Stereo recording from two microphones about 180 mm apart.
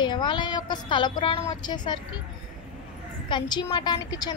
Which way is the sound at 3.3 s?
25° left (ahead or behind).